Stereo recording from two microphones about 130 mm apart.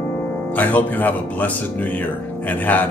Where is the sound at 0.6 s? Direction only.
15° left (ahead or behind).